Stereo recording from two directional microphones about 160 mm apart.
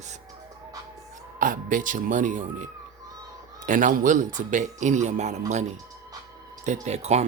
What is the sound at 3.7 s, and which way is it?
Speech, 55° right (ahead or behind).